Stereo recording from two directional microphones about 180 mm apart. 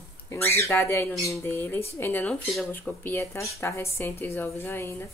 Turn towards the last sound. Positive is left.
turn(degrees=10)  # may be behind; listen again after turning